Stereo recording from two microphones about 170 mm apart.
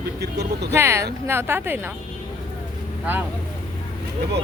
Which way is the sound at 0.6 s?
15° right (ahead or behind).